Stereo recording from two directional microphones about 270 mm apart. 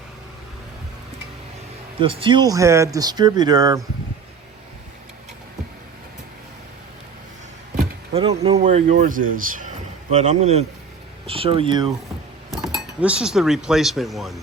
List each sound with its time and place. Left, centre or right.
2.0 s speech: centre
8.1 s speech: right
13.0 s speech: centre